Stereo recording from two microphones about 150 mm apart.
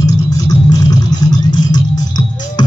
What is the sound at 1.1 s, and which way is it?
Vehicle, 25° left (ahead or behind).